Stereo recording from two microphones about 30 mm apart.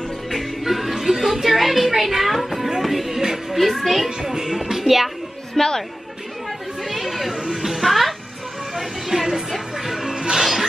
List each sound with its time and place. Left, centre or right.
0.3 s music: centre
4.2 s music: centre
5.6 s speech: centre
6.9 s chatter: centre
7.8 s music: centre
9.9 s music: centre